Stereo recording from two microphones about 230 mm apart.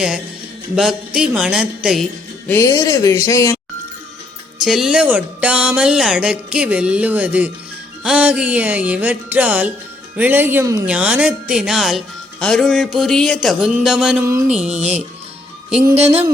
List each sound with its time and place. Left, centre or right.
0.8 s speech: centre
2.5 s speech: centre
4.6 s speech: centre
14.7 s speech: right